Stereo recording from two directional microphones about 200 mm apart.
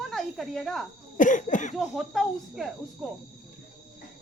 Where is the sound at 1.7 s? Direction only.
Centre (ahead or behind).